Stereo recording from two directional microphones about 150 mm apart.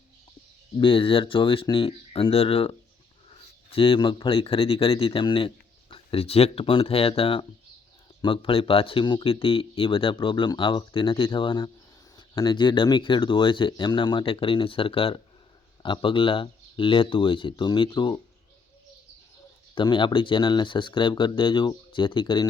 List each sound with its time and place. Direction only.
0.8 s speech: 35° left (ahead or behind)
19.7 s speech: 30° left (ahead or behind)